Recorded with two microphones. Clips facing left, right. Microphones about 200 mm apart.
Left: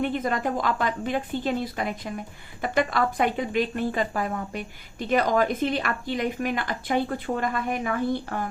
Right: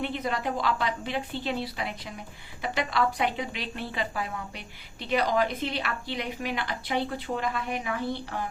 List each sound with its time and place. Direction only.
0.0 s a woman's voice: 50° left (ahead or behind)